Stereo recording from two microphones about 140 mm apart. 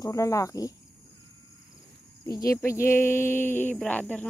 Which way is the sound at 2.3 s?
25° left (ahead or behind).